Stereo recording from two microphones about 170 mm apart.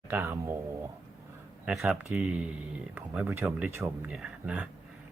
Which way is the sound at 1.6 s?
Centre (ahead or behind).